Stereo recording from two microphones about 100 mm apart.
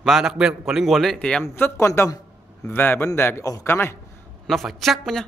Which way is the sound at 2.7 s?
20° left (ahead or behind).